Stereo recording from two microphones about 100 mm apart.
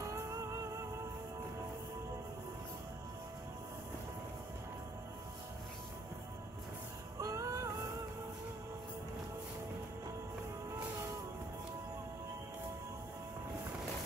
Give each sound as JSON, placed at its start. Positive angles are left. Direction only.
{"t": 0.0, "sound": "music", "side_deg": -30}
{"t": 7.2, "sound": "music", "side_deg": -35}